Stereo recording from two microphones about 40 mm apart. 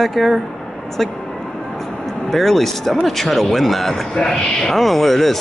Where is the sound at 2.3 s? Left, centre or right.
Centre.